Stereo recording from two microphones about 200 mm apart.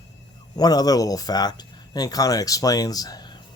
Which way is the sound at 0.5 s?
20° left (ahead or behind).